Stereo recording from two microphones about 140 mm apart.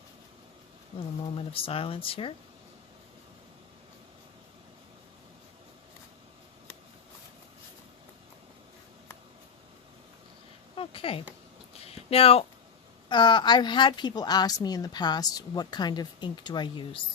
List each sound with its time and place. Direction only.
1.4 s a woman's voice: 40° left (ahead or behind)
10.8 s a sound: 40° left (ahead or behind)
13.1 s a woman's voice: 35° left (ahead or behind)